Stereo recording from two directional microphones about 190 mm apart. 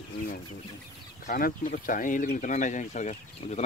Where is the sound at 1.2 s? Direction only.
45° left (ahead or behind).